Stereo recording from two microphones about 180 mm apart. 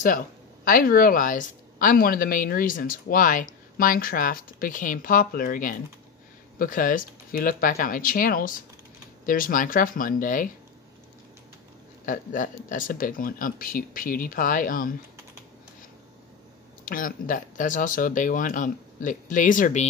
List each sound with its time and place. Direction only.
0.7 s a woman's voice: 50° left (ahead or behind)
12.1 s a woman's voice: 45° left (ahead or behind)
16.8 s a woman's voice: 50° left (ahead or behind)